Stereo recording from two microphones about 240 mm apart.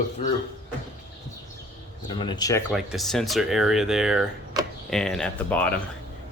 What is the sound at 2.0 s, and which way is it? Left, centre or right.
Speech, centre.